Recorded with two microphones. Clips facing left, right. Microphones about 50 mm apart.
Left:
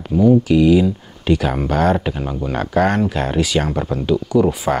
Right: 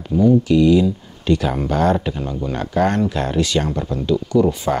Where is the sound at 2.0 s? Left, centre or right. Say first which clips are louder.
Left 1 dB; centre.